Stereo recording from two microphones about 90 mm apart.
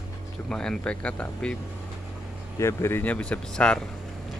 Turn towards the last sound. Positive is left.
turn(degrees=10)  # may be behind; listen again after turning